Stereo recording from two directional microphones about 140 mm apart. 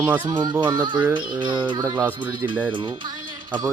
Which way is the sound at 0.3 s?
30° right (ahead or behind).